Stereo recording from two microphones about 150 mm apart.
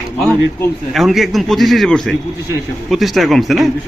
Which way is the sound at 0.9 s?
Centre (ahead or behind).